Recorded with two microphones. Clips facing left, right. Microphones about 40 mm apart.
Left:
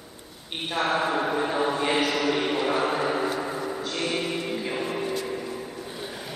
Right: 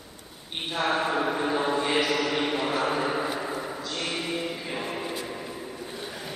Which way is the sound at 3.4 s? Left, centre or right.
Centre.